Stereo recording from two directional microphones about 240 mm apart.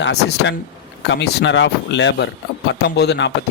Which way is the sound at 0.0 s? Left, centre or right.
Left.